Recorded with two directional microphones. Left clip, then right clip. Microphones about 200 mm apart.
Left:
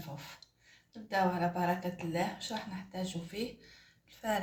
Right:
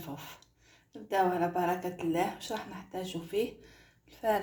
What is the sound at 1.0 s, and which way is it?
Speech, 35° right (ahead or behind).